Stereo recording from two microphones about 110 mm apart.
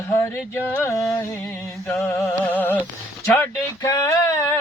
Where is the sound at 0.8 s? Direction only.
30° left (ahead or behind).